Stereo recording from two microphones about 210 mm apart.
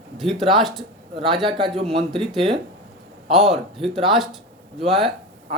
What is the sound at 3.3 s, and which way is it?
Speech, centre (ahead or behind).